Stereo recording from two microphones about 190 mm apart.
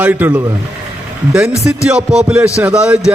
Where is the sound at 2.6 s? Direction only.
5° right (ahead or behind).